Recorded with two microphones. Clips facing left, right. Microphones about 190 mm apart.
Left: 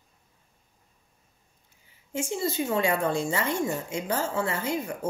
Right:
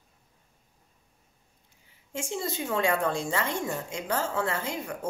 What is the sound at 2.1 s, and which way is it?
Speech, 5° left (ahead or behind).